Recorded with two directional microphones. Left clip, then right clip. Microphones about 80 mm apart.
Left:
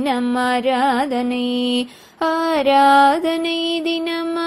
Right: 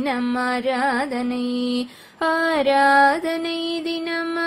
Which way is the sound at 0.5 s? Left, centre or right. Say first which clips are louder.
Left 5 dB; left.